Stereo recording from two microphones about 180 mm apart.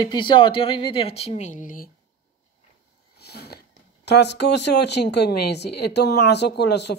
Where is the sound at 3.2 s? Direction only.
65° left (ahead or behind).